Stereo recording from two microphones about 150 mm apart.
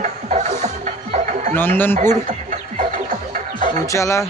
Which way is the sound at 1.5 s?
15° left (ahead or behind).